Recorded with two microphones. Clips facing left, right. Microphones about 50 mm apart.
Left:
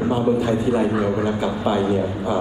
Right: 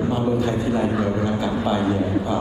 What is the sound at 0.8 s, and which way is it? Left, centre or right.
Speech, centre.